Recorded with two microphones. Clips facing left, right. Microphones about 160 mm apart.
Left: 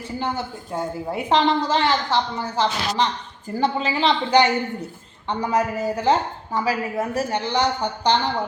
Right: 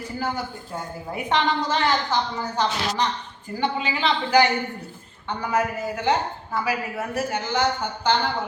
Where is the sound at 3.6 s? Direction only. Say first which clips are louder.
Left 3 dB; 35° left (ahead or behind).